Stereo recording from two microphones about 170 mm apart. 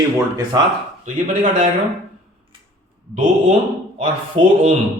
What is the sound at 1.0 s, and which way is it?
Speech, 50° right (ahead or behind).